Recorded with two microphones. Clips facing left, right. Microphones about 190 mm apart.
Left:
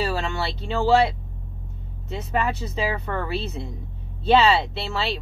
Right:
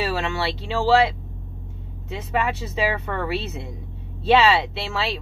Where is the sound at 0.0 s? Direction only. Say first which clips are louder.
Right 1 dB; centre (ahead or behind).